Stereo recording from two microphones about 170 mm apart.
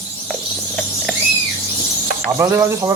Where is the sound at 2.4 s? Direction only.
15° right (ahead or behind).